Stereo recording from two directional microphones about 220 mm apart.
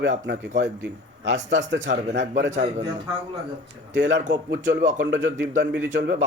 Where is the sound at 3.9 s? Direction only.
55° right (ahead or behind).